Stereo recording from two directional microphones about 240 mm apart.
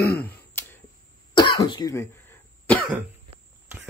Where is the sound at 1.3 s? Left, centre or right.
Centre.